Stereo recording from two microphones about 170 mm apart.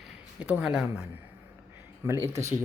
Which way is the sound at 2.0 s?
15° right (ahead or behind).